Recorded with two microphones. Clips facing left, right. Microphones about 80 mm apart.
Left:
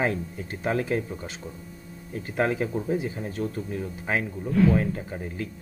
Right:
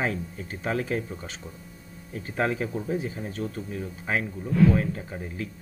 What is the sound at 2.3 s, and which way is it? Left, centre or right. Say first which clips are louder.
Speech: left 2 dB; centre.